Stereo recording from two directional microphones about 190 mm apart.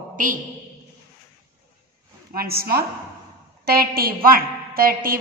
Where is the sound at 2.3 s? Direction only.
55° right (ahead or behind).